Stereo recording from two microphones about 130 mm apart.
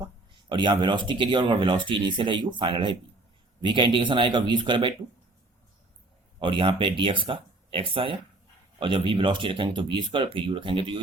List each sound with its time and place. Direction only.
0.4 s speech: 35° right (ahead or behind)
6.4 s speech: 40° right (ahead or behind)